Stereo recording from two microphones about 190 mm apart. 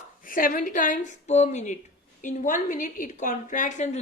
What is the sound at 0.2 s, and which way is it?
A woman's voice, 45° left (ahead or behind).